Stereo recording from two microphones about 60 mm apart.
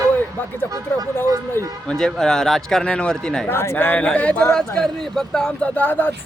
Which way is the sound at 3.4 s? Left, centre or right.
Left.